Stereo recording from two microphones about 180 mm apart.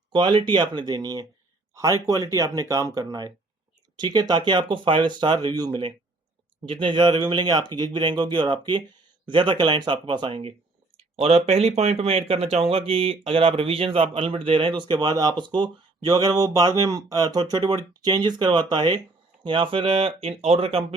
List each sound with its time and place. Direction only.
0.1 s speech: 25° right (ahead or behind)